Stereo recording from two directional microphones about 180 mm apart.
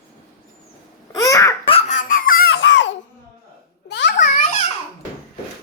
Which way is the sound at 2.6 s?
90° left.